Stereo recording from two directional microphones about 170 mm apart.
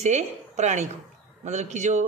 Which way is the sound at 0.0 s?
40° right (ahead or behind).